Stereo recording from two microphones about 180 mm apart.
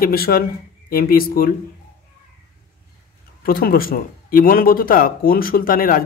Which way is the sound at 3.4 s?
55° left (ahead or behind).